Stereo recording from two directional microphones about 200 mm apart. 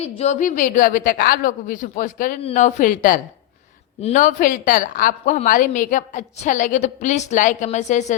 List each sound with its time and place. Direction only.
0.2 s a woman's voice: 35° left (ahead or behind)